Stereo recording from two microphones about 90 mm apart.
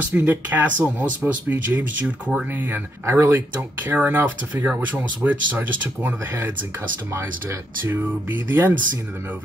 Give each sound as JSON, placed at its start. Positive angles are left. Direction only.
{"t": 0.1, "sound": "speech", "side_deg": -20}
{"t": 7.8, "sound": "speech", "side_deg": -20}